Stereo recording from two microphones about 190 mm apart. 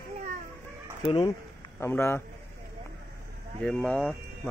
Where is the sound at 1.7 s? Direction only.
15° left (ahead or behind).